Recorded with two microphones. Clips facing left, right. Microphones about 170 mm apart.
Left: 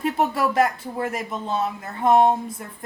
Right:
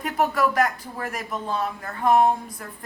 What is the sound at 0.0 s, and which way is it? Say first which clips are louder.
Speech: left 1 dB; 25° left (ahead or behind).